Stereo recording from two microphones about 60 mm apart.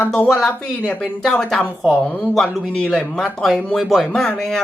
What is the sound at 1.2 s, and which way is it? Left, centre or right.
Speech, centre.